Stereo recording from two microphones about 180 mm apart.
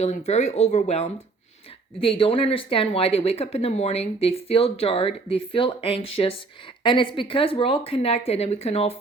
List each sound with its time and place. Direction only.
0.0 s speech: 40° left (ahead or behind)